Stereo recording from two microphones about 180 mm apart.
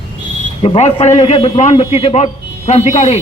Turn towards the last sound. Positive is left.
turn(degrees=40)  # may be behind; listen again after turning